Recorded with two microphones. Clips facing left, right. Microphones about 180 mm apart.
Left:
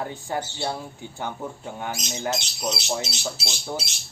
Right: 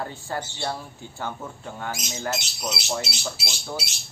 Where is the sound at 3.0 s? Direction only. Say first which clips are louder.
Left 1 dB; 10° right (ahead or behind).